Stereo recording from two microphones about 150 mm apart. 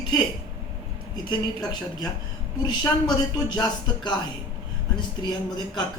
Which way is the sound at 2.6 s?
25° left (ahead or behind).